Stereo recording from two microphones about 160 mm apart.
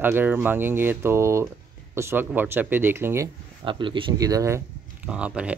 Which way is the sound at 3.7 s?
30° right (ahead or behind).